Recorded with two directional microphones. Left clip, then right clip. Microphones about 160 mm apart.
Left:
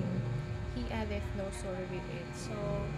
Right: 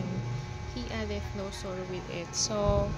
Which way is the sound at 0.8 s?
15° right (ahead or behind).